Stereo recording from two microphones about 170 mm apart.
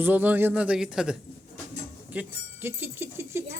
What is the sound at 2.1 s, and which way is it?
Speech, 10° right (ahead or behind).